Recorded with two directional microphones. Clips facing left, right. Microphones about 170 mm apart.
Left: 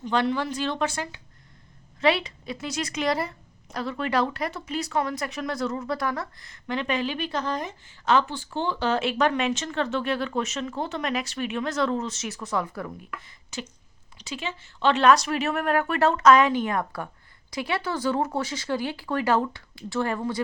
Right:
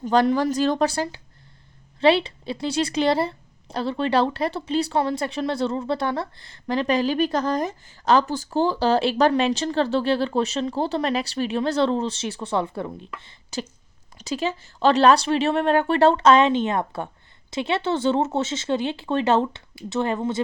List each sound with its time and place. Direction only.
0.0 s a woman's voice: 40° right (ahead or behind); by 20.4 s 20° right (ahead or behind)